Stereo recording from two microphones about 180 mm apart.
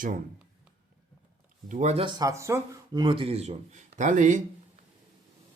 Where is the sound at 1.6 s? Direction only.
45° right (ahead or behind).